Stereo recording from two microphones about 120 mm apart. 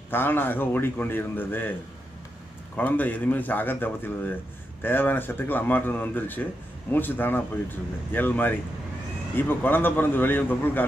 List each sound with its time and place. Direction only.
0.1 s a man's voice: 15° left (ahead or behind)